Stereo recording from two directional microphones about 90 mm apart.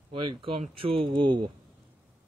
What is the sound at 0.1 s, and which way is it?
Speech, 75° right (ahead or behind).